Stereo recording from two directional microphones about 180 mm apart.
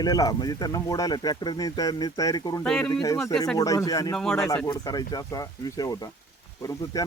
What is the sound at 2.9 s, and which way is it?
Speech, 20° left (ahead or behind).